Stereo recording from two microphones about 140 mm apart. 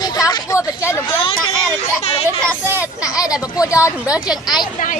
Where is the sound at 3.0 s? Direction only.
25° left (ahead or behind).